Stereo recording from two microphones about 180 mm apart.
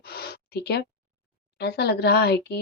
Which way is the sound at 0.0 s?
60° left (ahead or behind).